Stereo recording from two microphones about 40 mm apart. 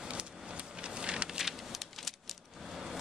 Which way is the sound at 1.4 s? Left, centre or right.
Centre.